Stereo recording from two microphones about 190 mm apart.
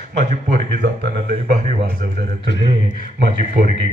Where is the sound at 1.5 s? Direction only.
50° right (ahead or behind).